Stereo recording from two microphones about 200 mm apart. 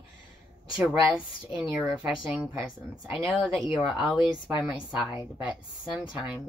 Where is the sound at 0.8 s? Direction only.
5° right (ahead or behind).